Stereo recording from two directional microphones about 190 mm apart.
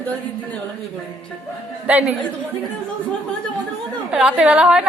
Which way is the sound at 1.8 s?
5° right (ahead or behind).